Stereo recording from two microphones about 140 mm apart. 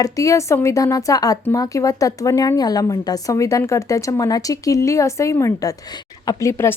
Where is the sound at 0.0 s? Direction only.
20° left (ahead or behind).